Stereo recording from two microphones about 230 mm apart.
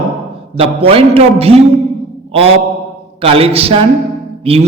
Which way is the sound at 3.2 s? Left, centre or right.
Right.